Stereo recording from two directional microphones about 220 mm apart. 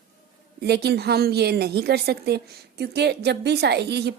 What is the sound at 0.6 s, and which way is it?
A woman's voice, 45° right (ahead or behind).